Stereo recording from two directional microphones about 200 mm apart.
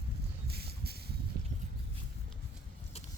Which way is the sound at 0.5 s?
50° right (ahead or behind).